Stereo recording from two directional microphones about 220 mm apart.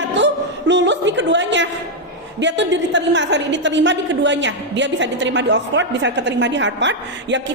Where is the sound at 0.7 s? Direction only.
55° right (ahead or behind).